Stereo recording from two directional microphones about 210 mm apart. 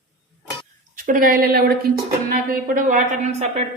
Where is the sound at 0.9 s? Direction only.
40° right (ahead or behind).